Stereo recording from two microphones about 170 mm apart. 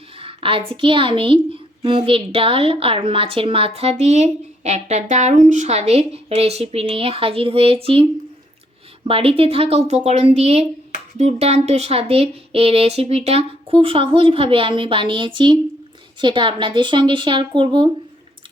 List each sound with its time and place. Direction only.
0.2 s a woman's voice: 30° right (ahead or behind)
9.0 s a woman's voice: 35° right (ahead or behind)